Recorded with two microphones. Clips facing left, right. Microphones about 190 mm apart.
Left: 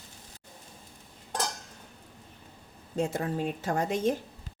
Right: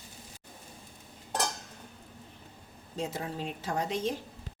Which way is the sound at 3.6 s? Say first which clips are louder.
Left 3 dB; 50° left (ahead or behind).